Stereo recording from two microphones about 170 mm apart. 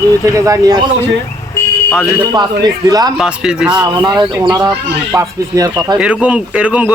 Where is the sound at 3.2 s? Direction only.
5° right (ahead or behind).